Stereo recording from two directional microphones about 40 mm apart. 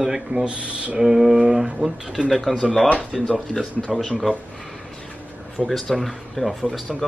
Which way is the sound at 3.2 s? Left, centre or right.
Left.